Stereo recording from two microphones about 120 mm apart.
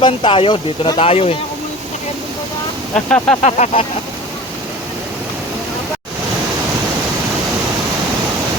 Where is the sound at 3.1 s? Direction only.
15° left (ahead or behind).